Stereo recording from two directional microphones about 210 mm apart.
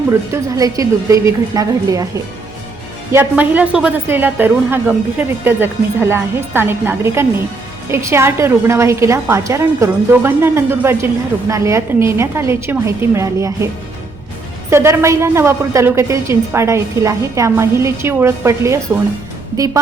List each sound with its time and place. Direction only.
0.1 s a woman's voice: 15° right (ahead or behind)
3.1 s a woman's voice: 10° right (ahead or behind)
14.7 s a woman's voice: 10° right (ahead or behind)